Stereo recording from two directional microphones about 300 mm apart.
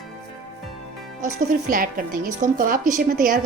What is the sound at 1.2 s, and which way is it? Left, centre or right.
A woman's voice, right.